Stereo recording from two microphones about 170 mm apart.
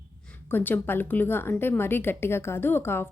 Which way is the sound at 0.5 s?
10° left (ahead or behind).